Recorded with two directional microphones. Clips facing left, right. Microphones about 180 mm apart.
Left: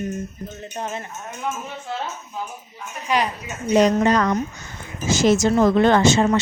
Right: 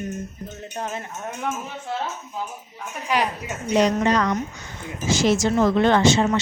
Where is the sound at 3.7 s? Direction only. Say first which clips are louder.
Left 3 dB; 45° left (ahead or behind).